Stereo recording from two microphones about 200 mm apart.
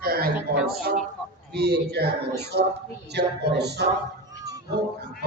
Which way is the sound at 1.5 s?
55° right (ahead or behind).